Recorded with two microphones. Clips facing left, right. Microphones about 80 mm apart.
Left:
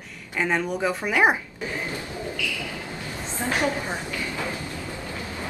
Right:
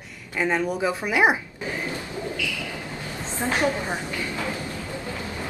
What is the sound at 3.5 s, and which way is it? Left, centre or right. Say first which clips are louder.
Speech: right 1 dB; right.